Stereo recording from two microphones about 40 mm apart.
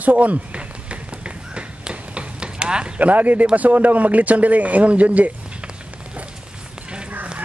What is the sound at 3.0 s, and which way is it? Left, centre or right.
Speech, right.